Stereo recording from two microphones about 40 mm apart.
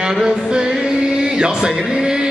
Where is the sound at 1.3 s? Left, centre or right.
Centre.